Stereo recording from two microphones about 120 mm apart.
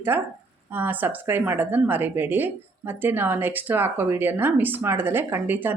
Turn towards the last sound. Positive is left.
turn(degrees=-15)  # may be behind; listen again after turning